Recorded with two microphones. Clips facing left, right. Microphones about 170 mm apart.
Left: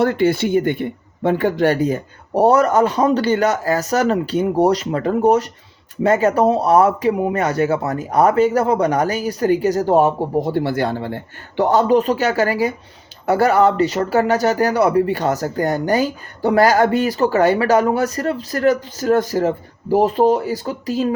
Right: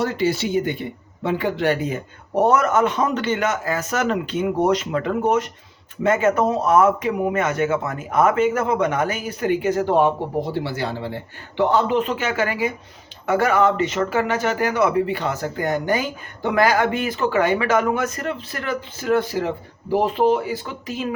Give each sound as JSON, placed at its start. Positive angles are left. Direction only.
{"t": 0.0, "sound": "speech", "side_deg": 55}